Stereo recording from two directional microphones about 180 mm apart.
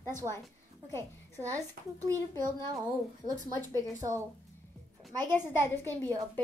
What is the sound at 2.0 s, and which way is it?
A child's voice, 20° right (ahead or behind).